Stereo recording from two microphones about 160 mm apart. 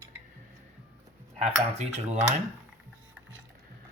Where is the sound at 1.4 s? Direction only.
45° right (ahead or behind).